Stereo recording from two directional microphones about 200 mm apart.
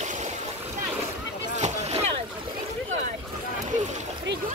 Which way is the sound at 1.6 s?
35° right (ahead or behind).